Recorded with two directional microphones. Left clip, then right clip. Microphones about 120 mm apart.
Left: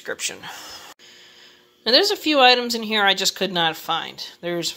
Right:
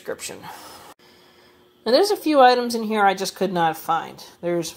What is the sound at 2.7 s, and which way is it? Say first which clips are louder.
Speech: even; 35° left (ahead or behind).